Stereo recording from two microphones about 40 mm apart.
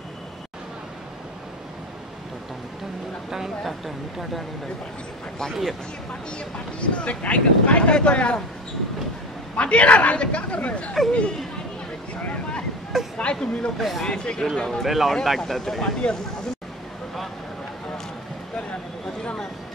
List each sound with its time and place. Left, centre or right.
3.3 s speech: centre
5.5 s speech: centre
6.3 s speech: left
9.6 s a man's voice: left
13.2 s speech: left
13.7 s speech: centre
14.0 s speech: left
14.9 s speech: centre
15.8 s speech: left